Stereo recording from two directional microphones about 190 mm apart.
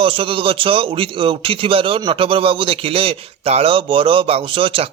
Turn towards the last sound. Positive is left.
turn(degrees=-30)  # may be behind; listen again after turning